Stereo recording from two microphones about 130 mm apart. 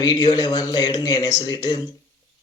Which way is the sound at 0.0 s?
35° left (ahead or behind).